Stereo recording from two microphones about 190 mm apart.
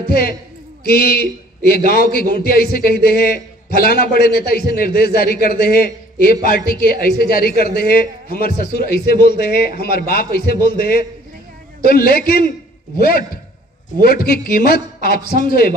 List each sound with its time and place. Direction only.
0.1 s a man's voice: 50° left (ahead or behind)
14.0 s a man's voice: 50° left (ahead or behind)